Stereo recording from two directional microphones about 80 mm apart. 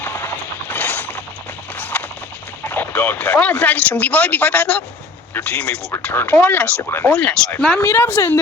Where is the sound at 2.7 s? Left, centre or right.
Left.